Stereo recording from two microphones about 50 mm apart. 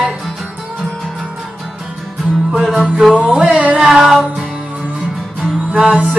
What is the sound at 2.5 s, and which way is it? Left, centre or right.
Music, centre.